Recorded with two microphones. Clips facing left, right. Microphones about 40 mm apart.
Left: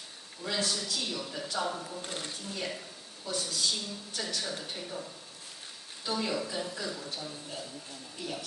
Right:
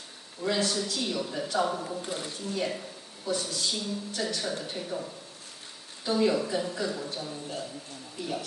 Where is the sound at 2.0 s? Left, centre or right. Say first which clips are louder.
Right 4 dB; right.